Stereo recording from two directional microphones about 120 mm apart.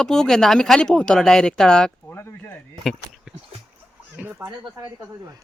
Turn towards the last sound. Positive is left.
turn(degrees=-25)  # may be behind; listen again after turning